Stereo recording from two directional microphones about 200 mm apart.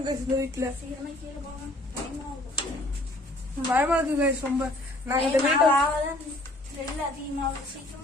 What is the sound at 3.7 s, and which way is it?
Speech, 10° right (ahead or behind).